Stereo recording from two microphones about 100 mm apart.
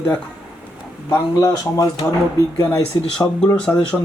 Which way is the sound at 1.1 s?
35° left (ahead or behind).